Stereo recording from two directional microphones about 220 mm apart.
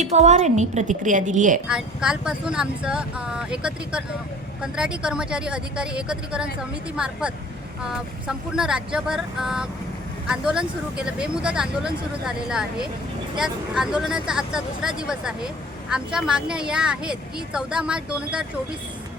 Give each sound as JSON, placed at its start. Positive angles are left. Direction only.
{"t": 0.0, "sound": "a woman's voice", "side_deg": -30}
{"t": 1.6, "sound": "a woman's voice", "side_deg": -5}